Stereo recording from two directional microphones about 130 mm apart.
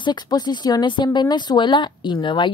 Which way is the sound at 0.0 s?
35° left (ahead or behind).